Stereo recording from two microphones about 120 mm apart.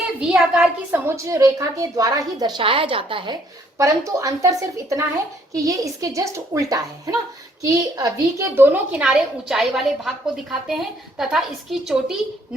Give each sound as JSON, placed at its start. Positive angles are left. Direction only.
{"t": 0.2, "sound": "a woman's voice", "side_deg": -5}
{"t": 0.9, "sound": "a woman's voice", "side_deg": -20}
{"t": 3.8, "sound": "speech", "side_deg": -25}
{"t": 8.5, "sound": "a woman's voice", "side_deg": -15}